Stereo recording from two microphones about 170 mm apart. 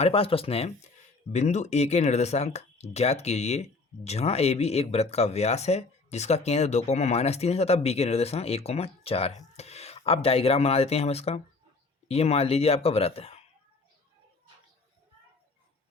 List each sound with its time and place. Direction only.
0.0 s speech: 35° left (ahead or behind)